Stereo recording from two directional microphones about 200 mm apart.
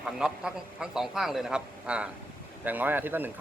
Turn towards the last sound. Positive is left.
turn(degrees=-10)  # may be behind; listen again after turning